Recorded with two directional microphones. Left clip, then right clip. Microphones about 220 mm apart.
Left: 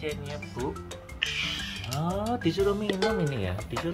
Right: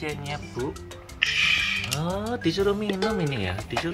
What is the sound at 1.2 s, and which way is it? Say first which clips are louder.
Music: right 9 dB; 5° left (ahead or behind).